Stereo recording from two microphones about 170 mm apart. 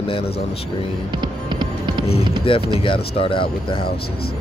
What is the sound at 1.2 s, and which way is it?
Hum, 25° right (ahead or behind).